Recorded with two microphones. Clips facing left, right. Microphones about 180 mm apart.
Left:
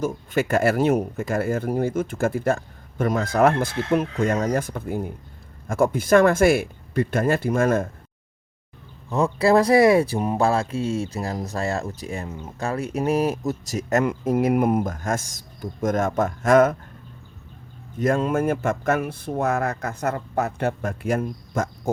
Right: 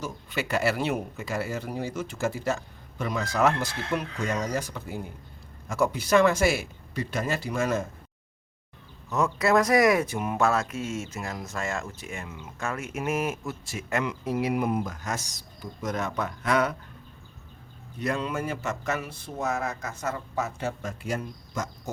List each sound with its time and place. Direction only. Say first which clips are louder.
0.0 s speech: left 9 dB; 50° left (ahead or behind)
9.0 s speech: left 5 dB; 30° left (ahead or behind); by 16.7 s 45° left (ahead or behind)
17.9 s speech: left 8 dB; 45° left (ahead or behind)